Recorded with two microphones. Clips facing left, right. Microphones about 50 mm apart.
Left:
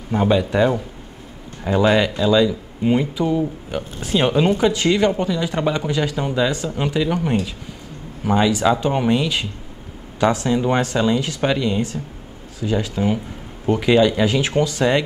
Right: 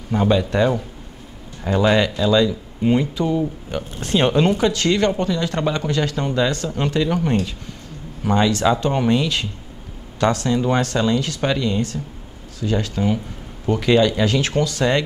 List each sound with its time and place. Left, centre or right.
0.1 s speech: centre